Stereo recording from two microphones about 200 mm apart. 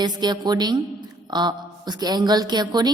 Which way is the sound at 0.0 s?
20° right (ahead or behind).